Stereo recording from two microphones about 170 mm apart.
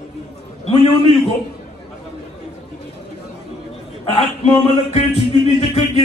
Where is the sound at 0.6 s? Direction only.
35° left (ahead or behind).